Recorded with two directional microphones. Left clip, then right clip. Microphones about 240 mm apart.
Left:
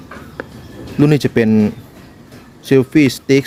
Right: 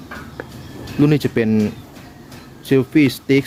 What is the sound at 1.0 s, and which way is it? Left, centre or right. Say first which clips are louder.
Speech: left 3 dB; centre.